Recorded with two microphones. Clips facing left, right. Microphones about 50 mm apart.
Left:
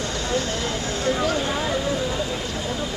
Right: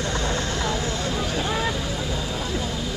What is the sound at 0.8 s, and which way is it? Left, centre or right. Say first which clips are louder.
Speech: left 3 dB; left.